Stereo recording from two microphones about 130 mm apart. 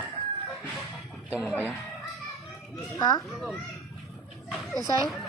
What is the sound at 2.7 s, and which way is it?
Speech, 30° left (ahead or behind).